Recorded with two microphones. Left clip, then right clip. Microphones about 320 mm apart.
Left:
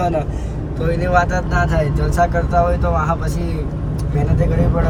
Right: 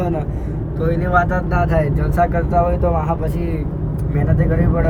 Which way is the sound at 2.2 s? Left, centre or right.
Left.